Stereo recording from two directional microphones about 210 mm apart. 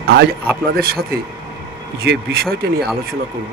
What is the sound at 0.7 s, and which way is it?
Speech, 45° right (ahead or behind).